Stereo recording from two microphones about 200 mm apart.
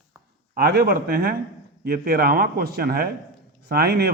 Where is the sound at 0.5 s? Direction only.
50° right (ahead or behind).